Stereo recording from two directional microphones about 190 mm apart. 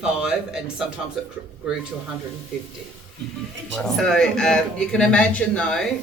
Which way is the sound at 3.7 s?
Centre (ahead or behind).